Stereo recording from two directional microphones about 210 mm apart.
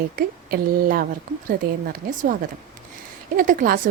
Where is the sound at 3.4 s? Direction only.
40° right (ahead or behind).